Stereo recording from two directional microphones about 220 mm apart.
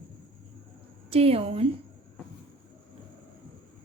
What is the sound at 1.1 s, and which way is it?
Speech, 25° right (ahead or behind).